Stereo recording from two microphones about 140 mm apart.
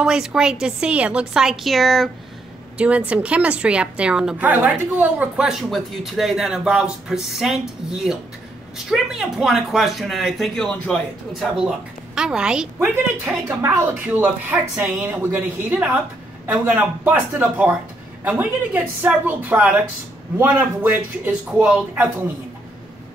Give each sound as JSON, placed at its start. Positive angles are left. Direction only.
{"t": 0.0, "sound": "a woman's voice", "side_deg": -5}